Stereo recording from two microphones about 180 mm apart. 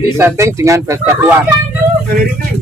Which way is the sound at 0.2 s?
15° right (ahead or behind).